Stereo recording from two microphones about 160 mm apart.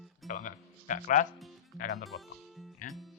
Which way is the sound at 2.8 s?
55° left (ahead or behind).